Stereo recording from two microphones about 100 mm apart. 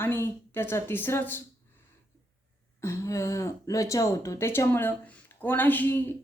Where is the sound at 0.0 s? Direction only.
25° left (ahead or behind).